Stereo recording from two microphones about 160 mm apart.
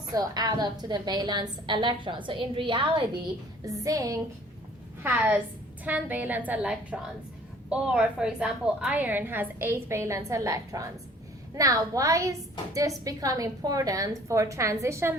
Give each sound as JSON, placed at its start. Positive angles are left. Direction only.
{"t": 0.1, "sound": "a woman's voice", "side_deg": -25}
{"t": 3.6, "sound": "a woman's voice", "side_deg": -20}
{"t": 5.0, "sound": "a woman's voice", "side_deg": -10}